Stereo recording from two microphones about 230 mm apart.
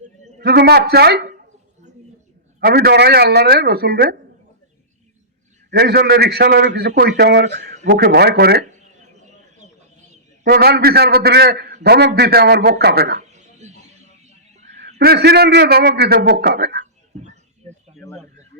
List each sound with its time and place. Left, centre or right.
0.3 s a man's voice: right
2.6 s a man's voice: right
5.7 s a man's voice: right
10.4 s a man's voice: right
13.3 s chicken: right
14.7 s a man's voice: right